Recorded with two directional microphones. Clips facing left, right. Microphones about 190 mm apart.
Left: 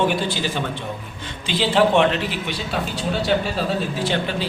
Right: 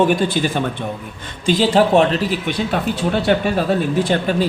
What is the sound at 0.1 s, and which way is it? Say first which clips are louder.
Speech: right 6 dB; 50° right (ahead or behind).